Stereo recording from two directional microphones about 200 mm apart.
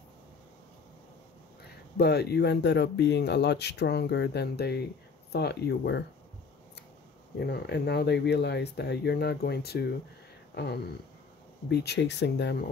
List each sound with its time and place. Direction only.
2.0 s speech: 55° left (ahead or behind)
7.3 s speech: 55° left (ahead or behind)
10.5 s a sound: 55° left (ahead or behind)
11.7 s speech: 55° left (ahead or behind)